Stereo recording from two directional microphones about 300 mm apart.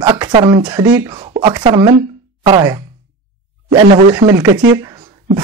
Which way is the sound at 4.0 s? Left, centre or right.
Centre.